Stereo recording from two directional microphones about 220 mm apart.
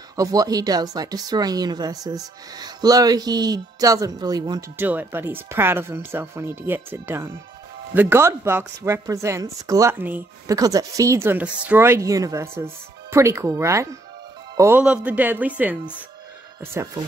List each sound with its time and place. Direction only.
0.1 s speech: 15° right (ahead or behind)